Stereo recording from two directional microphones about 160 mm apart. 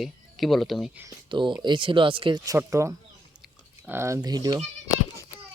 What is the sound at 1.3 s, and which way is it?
Speech, 30° right (ahead or behind).